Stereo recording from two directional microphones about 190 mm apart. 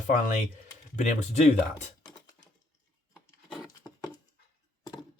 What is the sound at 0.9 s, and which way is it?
Speech, 40° left (ahead or behind).